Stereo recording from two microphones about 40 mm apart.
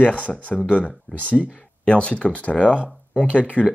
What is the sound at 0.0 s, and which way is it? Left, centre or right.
Speech, left.